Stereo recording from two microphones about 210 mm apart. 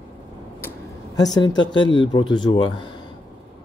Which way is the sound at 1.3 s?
20° left (ahead or behind).